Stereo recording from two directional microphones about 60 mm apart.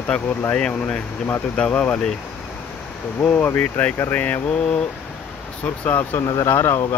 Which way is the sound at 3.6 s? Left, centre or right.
Left.